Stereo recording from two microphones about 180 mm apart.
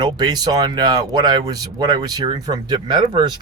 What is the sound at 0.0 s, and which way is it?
Speech, 25° right (ahead or behind).